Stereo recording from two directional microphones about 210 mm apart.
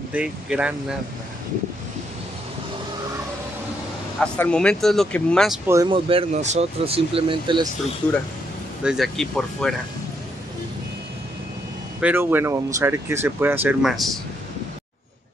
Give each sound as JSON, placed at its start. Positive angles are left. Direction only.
{"t": 0.1, "sound": "speech", "side_deg": -5}
{"t": 4.2, "sound": "speech", "side_deg": 5}
{"t": 5.7, "sound": "speech", "side_deg": -20}
{"t": 8.8, "sound": "speech", "side_deg": 0}
{"t": 12.0, "sound": "speech", "side_deg": -10}